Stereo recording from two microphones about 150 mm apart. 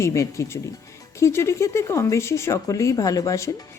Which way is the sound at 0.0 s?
20° left (ahead or behind).